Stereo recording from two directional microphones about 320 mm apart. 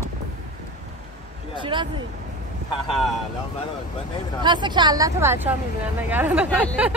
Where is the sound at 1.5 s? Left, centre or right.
Centre.